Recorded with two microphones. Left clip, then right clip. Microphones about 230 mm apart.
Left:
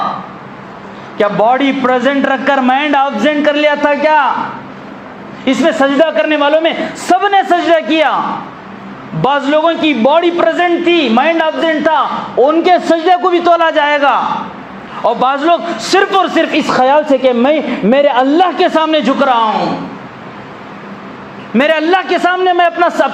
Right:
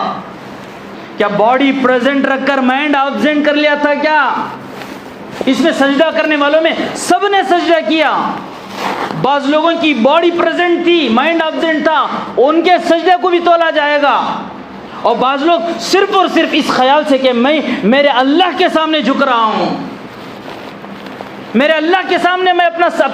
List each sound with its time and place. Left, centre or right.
1.2 s a man's voice: left
5.5 s a man's voice: left
9.2 s a man's voice: left
21.5 s a man's voice: left